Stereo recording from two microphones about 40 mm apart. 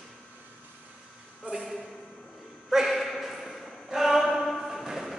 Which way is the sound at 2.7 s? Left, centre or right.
Centre.